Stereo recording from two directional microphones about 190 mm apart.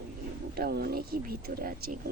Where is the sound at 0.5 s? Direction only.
55° right (ahead or behind).